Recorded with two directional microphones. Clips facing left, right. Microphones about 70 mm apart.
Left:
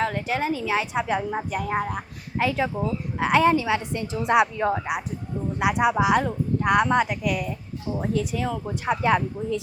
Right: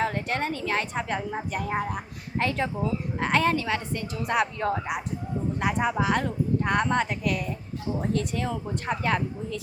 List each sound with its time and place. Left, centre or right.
0.0 s a woman's voice: centre
2.4 s a woman's voice: centre; by 4.4 s left
4.5 s speech: centre
7.9 s speech: centre
8.1 s a woman's voice: centre
8.6 s speech: centre